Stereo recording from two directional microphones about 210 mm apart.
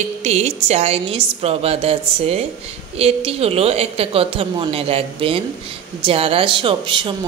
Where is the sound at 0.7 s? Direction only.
30° right (ahead or behind).